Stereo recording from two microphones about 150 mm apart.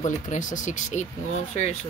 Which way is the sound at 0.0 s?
55° left (ahead or behind).